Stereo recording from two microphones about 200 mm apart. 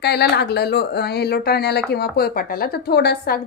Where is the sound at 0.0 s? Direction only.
55° left (ahead or behind).